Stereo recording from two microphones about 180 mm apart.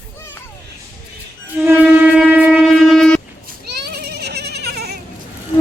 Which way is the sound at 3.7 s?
65° right (ahead or behind).